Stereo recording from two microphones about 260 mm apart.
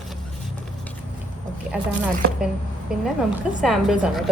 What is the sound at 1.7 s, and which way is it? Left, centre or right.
A woman's voice, centre.